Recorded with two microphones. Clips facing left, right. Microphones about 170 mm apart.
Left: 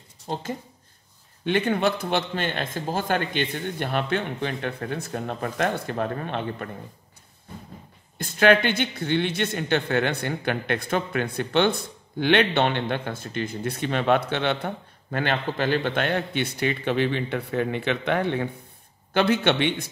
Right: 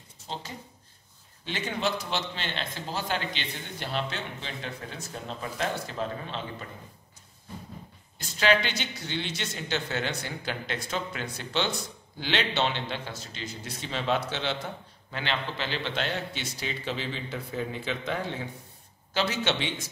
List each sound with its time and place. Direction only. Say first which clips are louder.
0.3 s speech: left 8 dB; 50° left (ahead or behind)
8.2 s speech: left 6 dB; 55° left (ahead or behind)